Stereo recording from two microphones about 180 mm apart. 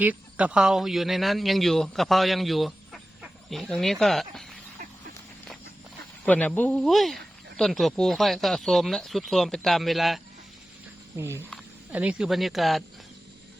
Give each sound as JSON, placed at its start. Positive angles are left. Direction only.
{"t": 0.0, "sound": "speech", "side_deg": -10}
{"t": 6.2, "sound": "speech", "side_deg": 10}
{"t": 11.2, "sound": "speech", "side_deg": -15}